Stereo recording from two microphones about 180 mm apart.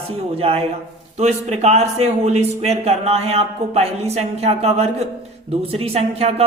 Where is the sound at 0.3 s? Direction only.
35° right (ahead or behind).